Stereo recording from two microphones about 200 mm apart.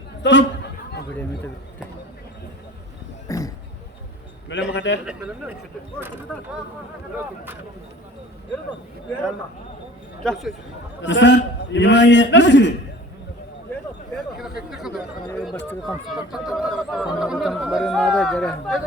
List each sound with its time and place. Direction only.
0.2 s a man's voice: 65° left (ahead or behind)
3.2 s a sound: 15° left (ahead or behind)
4.7 s a man's voice: 60° left (ahead or behind)
5.0 s speech: 5° right (ahead or behind)
10.2 s speech: 5° left (ahead or behind)
11.0 s a man's voice: 65° left (ahead or behind)
14.7 s chatter: 5° right (ahead or behind)
15.5 s speech: 10° left (ahead or behind)
16.0 s speech: centre (ahead or behind)